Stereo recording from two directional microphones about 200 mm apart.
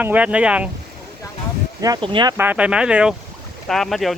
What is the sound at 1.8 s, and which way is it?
Speech, 20° right (ahead or behind).